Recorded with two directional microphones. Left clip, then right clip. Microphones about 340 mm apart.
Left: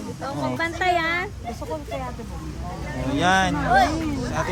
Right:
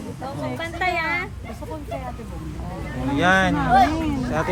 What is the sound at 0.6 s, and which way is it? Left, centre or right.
Speech, left.